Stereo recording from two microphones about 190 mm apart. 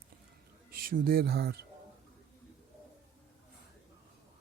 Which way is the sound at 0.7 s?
50° right (ahead or behind).